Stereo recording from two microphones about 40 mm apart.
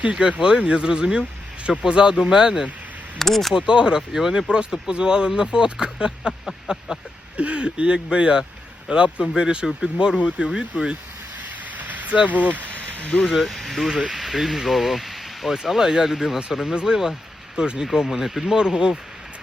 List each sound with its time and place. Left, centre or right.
0.0 s speech: right
3.2 s speech: centre
3.5 s speech: right
4.1 s speech: centre
4.4 s speech: right
11.8 s speech: right
13.2 s speech: centre
18.4 s speech: centre